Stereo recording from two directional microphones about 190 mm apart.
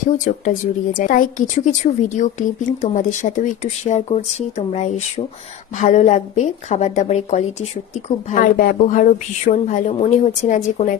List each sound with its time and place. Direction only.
0.0 s a woman's voice: 45° left (ahead or behind)